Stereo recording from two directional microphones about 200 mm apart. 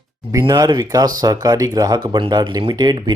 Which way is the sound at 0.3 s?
15° right (ahead or behind).